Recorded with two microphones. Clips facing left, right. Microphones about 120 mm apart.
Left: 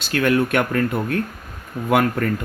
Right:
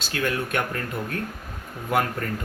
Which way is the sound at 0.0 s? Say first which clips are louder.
Left 8 dB; 65° left (ahead or behind).